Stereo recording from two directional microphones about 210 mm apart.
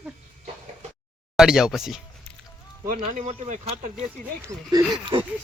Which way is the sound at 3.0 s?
30° right (ahead or behind).